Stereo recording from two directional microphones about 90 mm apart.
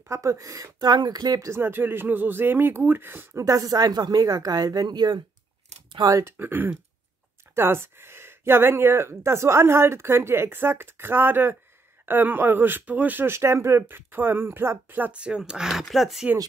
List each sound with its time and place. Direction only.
0.1 s speech: 35° right (ahead or behind)
1.5 s speech: 25° right (ahead or behind)
3.4 s speech: 40° right (ahead or behind)
6.0 s speech: 35° right (ahead or behind)
6.3 s speech: 20° right (ahead or behind); by 16.3 s centre (ahead or behind)